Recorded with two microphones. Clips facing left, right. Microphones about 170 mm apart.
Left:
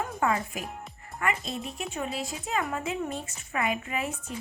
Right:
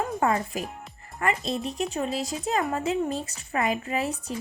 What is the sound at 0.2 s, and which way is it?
A woman's voice, 40° right (ahead or behind).